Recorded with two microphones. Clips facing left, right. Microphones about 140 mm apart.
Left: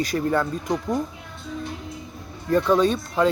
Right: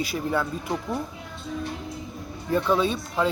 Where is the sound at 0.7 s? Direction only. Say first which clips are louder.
Left 4 dB; 15° left (ahead or behind).